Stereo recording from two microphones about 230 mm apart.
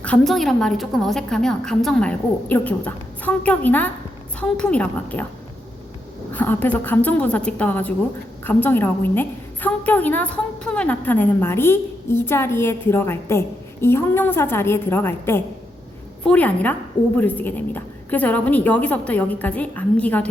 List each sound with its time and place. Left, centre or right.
0.0 s a woman's voice: centre
6.3 s a woman's voice: centre